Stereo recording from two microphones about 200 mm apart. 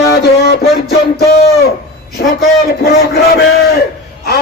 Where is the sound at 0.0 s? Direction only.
55° left (ahead or behind).